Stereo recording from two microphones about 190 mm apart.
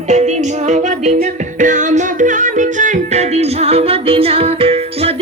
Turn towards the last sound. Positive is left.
turn(degrees=-30)  # may be behind; listen again after turning